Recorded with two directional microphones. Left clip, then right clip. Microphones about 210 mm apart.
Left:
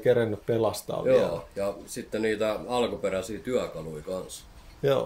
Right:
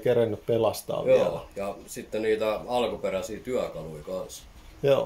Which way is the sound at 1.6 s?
35° left (ahead or behind).